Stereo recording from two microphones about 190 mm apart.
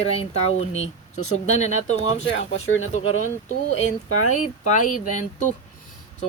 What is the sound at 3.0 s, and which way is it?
Speech, 90° left.